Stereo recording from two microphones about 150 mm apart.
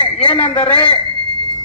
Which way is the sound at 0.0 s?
35° left (ahead or behind).